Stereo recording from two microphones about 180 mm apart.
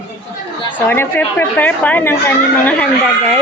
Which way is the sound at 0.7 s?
10° left (ahead or behind).